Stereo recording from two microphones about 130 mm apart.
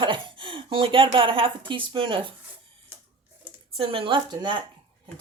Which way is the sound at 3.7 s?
45° right (ahead or behind).